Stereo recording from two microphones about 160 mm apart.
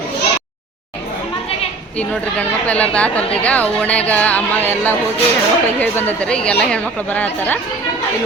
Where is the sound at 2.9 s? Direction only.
10° left (ahead or behind).